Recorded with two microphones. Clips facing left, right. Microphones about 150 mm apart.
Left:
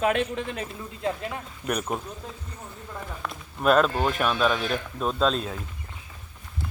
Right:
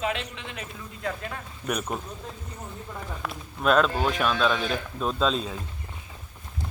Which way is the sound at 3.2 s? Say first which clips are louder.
Left 2 dB; centre (ahead or behind).